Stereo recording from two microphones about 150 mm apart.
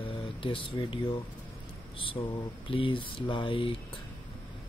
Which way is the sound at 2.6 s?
35° left (ahead or behind).